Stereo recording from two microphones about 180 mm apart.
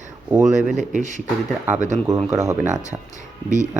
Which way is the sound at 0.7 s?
45° right (ahead or behind).